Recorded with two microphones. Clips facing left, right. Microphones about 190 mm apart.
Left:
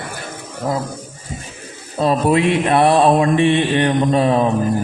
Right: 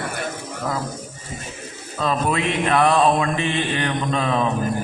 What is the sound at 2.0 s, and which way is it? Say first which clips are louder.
A man's voice: left 7 dB; 35° left (ahead or behind).